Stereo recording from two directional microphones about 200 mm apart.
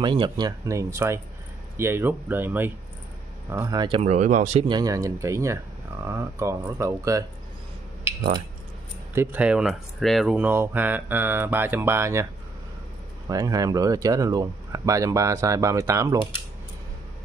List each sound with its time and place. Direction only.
0.0 s speech: 25° right (ahead or behind)
4.0 s speech: 35° right (ahead or behind)
4.6 s speech: 20° right (ahead or behind)
9.1 s speech: 10° right (ahead or behind)
13.3 s speech: 15° right (ahead or behind)